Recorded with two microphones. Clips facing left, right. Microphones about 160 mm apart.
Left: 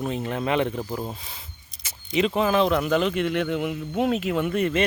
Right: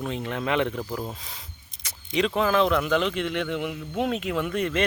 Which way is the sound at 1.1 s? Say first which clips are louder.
Left 1 dB; centre (ahead or behind).